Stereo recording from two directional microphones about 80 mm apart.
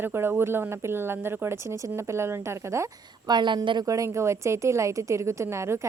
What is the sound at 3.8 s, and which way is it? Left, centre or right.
A woman's voice, right.